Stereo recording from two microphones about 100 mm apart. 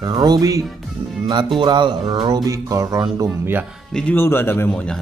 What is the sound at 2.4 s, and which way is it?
Speech, 35° right (ahead or behind).